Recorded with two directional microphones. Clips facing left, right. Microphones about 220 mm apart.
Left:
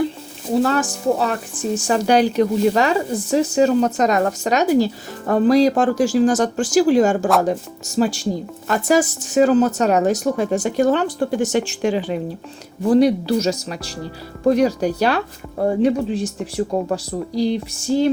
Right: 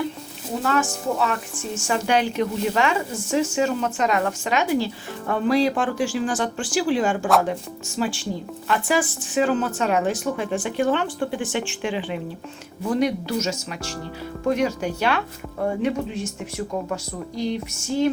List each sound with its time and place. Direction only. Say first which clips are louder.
0.5 s speech: left 5 dB; 35° left (ahead or behind)